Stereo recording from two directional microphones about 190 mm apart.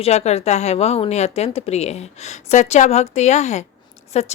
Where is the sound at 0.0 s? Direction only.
35° left (ahead or behind).